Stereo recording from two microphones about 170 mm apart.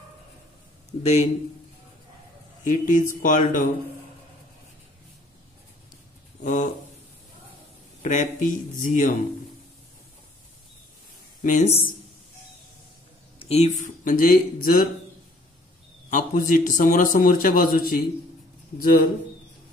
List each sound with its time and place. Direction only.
1.0 s a man's voice: 40° left (ahead or behind)
2.6 s a man's voice: 50° left (ahead or behind)
6.4 s a man's voice: 50° left (ahead or behind)
8.0 s a man's voice: 45° left (ahead or behind)
11.4 s a man's voice: 40° left (ahead or behind)
13.4 s a man's voice: 40° left (ahead or behind); by 14.9 s 55° left (ahead or behind)
16.1 s a man's voice: 50° left (ahead or behind)